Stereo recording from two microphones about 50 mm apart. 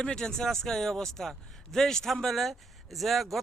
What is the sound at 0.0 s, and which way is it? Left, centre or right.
Speech, centre.